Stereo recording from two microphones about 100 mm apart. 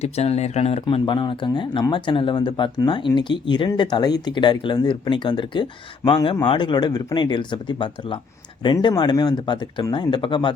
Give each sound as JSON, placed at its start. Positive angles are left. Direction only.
{"t": 0.0, "sound": "speech", "side_deg": 90}